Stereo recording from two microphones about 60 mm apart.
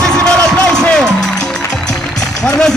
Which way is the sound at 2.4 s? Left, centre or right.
Centre.